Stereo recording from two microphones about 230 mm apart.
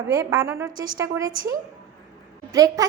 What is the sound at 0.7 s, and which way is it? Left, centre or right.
Speech, right.